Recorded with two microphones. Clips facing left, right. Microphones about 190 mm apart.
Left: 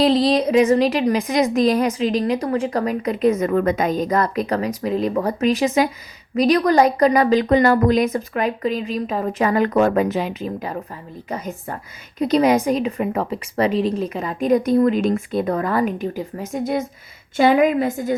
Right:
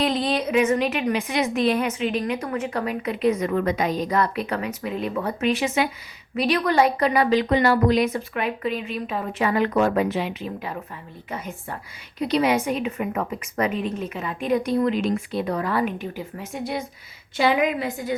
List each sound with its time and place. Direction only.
0.0 s a woman's voice: 35° left (ahead or behind)